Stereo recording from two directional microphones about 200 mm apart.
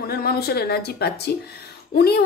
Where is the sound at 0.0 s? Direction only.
50° left (ahead or behind).